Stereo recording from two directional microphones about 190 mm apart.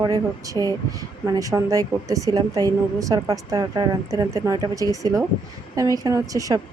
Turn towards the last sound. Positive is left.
turn(degrees=-15)  # may be behind; listen again after turning